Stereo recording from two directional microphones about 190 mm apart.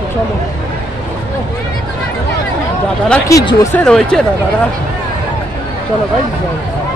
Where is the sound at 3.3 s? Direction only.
15° left (ahead or behind).